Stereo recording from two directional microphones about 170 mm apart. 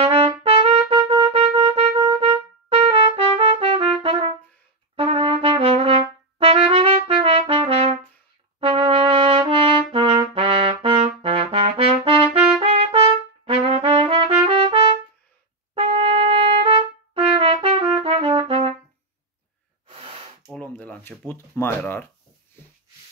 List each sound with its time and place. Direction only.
0.0 s trumpet: 35° right (ahead or behind)
0.4 s music: 35° right (ahead or behind)
4.9 s trumpet: 35° right (ahead or behind)
19.9 s gasp: 35° right (ahead or behind)
20.6 s shuffling cards: 10° left (ahead or behind)
21.3 s speech: 15° left (ahead or behind)